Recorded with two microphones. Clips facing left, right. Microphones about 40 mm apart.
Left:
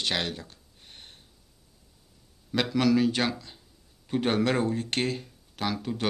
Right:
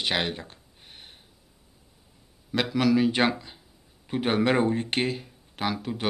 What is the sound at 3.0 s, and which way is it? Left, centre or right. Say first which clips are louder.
Speech: right 4 dB; right.